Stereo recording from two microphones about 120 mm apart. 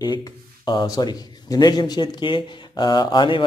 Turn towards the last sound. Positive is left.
turn(degrees=40)  # may be behind; listen again after turning